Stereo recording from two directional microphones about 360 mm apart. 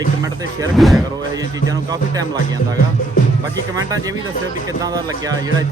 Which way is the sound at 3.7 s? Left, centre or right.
Centre.